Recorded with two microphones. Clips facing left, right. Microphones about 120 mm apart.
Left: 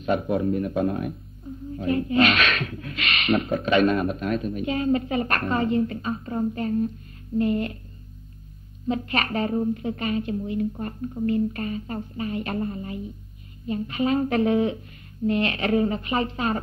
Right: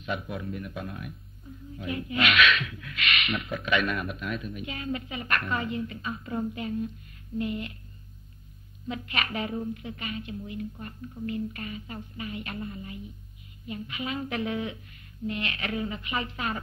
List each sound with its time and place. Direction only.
0.0 s speech: 45° left (ahead or behind)
0.3 s a woman's voice: 35° left (ahead or behind)
8.8 s speech: 35° left (ahead or behind)